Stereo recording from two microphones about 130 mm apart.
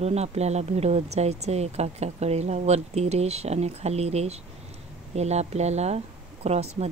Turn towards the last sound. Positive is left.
turn(degrees=-55)  # may be behind; listen again after turning